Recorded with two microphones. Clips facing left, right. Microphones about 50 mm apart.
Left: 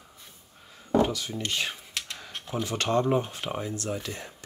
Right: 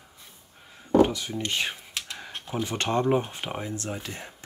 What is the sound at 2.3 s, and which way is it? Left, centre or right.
Speech, centre.